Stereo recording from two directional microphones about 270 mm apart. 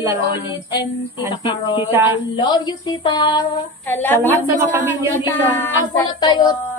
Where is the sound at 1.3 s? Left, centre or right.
Centre.